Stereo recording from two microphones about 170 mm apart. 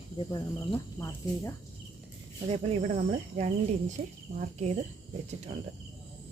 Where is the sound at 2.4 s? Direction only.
35° right (ahead or behind).